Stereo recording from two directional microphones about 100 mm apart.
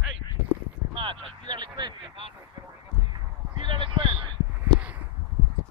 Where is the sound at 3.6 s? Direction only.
55° right (ahead or behind).